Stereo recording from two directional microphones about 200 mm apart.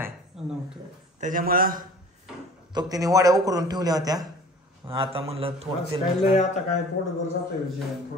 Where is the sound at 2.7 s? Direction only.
20° right (ahead or behind).